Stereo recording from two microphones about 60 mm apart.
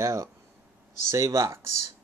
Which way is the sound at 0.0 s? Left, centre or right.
Right.